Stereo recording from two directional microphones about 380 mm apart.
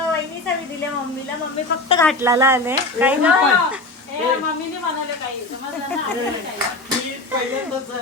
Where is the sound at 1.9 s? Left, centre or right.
Centre.